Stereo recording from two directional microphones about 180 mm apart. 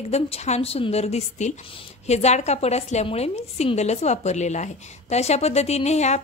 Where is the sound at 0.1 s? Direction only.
35° left (ahead or behind).